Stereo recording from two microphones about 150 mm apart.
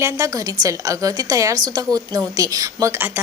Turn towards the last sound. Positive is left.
turn(degrees=-15)  # may be behind; listen again after turning